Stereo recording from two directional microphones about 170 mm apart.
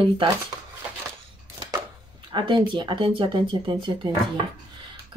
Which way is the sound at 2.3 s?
30° right (ahead or behind).